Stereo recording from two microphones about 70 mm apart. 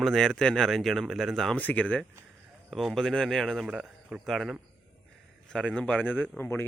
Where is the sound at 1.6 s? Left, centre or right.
Left.